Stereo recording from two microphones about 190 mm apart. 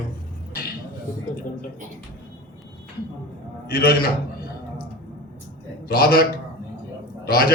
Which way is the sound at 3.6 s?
55° left (ahead or behind).